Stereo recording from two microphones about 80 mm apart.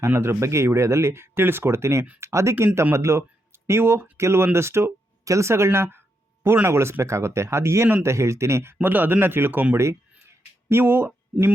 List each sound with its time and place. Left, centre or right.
0.0 s speech: right